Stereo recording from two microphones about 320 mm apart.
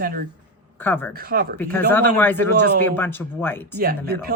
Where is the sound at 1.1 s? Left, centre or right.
Right.